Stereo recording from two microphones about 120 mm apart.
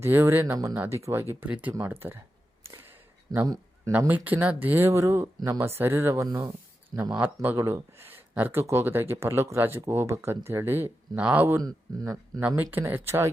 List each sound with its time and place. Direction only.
0.0 s speech: 20° right (ahead or behind)
1.3 s speech: 15° right (ahead or behind)
2.6 s a sound: 20° right (ahead or behind)
3.3 s a man's voice: 30° right (ahead or behind)
4.0 s speech: 15° right (ahead or behind)
6.2 s speech: 40° right (ahead or behind)
7.1 s speech: 15° right (ahead or behind)
11.4 s speech: 25° right (ahead or behind)
12.4 s speech: 15° right (ahead or behind)